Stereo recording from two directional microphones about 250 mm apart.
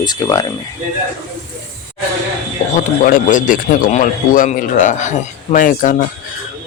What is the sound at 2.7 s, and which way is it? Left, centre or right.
A man's voice, left.